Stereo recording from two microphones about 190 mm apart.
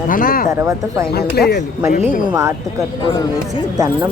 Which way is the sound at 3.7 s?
20° right (ahead or behind).